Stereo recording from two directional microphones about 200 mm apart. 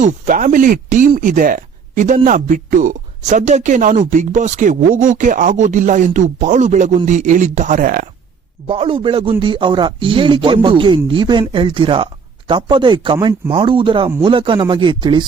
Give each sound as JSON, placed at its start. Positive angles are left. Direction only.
{"t": 0.0, "sound": "speech", "side_deg": -40}
{"t": 8.6, "sound": "speech", "side_deg": -25}